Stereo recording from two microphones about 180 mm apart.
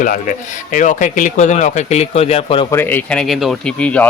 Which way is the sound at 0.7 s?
45° left (ahead or behind).